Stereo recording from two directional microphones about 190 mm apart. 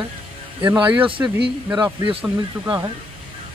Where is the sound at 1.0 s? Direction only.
25° right (ahead or behind).